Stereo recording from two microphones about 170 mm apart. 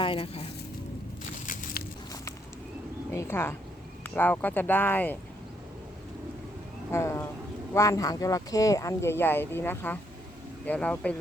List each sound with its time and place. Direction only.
0.0 s speech: 30° left (ahead or behind)
3.1 s speech: 15° left (ahead or behind)
6.9 s speech: 15° left (ahead or behind)